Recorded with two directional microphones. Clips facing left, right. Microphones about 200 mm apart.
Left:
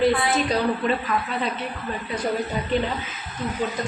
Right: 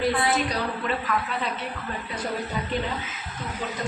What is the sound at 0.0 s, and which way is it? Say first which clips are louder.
Speech: left 3 dB; 25° left (ahead or behind).